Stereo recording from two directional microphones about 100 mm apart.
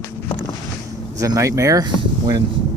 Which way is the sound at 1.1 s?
35° right (ahead or behind).